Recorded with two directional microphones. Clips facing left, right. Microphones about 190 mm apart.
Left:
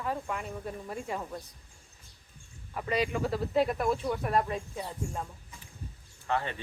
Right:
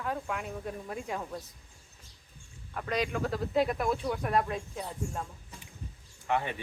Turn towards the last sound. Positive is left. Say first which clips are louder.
# right 1 dB
turn(degrees=-15)  # may be behind; listen again after turning